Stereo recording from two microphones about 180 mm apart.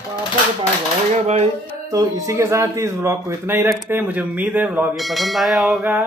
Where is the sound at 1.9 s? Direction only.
20° right (ahead or behind).